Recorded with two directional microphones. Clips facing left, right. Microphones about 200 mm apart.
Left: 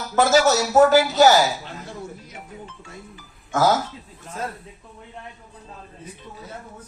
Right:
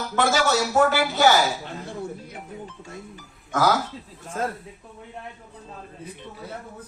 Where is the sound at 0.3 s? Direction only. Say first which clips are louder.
Left 4 dB; 40° left (ahead or behind).